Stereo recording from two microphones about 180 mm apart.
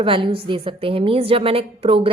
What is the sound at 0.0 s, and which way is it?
A woman's voice, 30° right (ahead or behind).